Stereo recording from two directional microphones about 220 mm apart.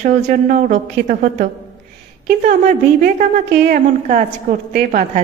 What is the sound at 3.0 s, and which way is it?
A woman's voice, 35° right (ahead or behind).